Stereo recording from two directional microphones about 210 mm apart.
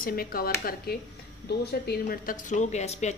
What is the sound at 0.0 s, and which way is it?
Speech, 45° left (ahead or behind).